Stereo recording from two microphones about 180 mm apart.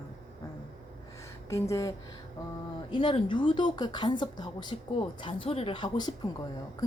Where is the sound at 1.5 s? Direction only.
15° left (ahead or behind).